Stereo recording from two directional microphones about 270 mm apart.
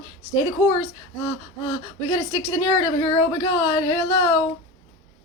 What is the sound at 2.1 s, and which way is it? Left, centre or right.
A woman's voice, centre.